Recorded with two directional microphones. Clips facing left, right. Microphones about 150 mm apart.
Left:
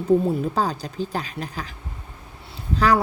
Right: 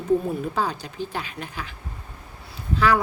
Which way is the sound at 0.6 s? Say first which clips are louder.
Left 2 dB; 40° left (ahead or behind).